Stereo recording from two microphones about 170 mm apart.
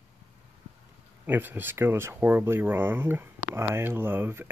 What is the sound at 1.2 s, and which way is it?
Speech, 10° right (ahead or behind).